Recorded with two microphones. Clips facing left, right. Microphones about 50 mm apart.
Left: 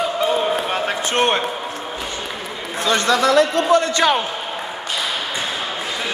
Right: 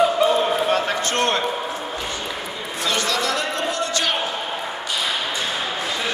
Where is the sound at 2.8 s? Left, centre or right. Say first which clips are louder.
Left 6 dB; left.